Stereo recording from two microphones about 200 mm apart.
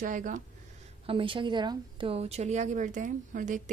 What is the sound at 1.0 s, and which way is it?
A woman's voice, 25° right (ahead or behind).